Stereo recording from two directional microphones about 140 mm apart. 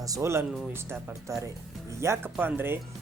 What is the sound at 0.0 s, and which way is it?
Speech, 20° right (ahead or behind).